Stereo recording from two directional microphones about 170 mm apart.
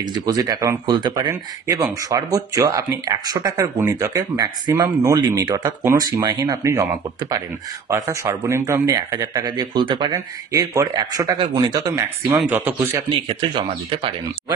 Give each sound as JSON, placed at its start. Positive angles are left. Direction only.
{"t": 0.0, "sound": "speech", "side_deg": -20}
{"t": 12.4, "sound": "speech", "side_deg": -10}
{"t": 13.1, "sound": "speech", "side_deg": -30}